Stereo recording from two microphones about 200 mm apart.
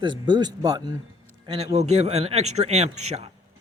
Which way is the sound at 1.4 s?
30° right (ahead or behind).